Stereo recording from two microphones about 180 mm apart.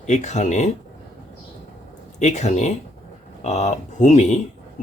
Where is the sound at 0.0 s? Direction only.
40° left (ahead or behind).